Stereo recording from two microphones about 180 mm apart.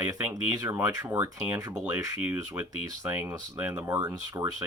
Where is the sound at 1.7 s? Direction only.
5° right (ahead or behind).